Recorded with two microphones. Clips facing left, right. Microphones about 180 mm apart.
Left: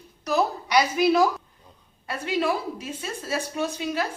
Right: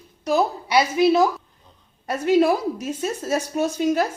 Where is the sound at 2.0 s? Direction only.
40° right (ahead or behind).